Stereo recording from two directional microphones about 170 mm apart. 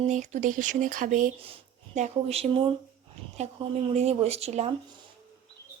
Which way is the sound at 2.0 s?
40° right (ahead or behind).